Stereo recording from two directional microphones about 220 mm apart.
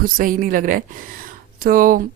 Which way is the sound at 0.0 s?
40° right (ahead or behind).